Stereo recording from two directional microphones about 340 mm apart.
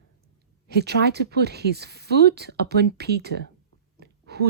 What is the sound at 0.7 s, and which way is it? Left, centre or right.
Speech, right.